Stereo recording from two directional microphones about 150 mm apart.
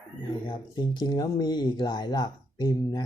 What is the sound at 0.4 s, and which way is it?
Speech, 30° left (ahead or behind).